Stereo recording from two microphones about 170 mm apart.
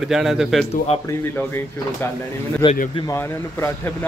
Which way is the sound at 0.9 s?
35° left (ahead or behind).